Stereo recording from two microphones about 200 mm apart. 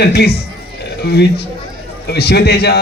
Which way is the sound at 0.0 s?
55° left (ahead or behind).